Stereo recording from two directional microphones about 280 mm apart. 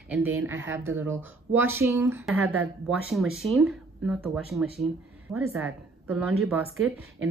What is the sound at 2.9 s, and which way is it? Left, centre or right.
A woman's voice, centre.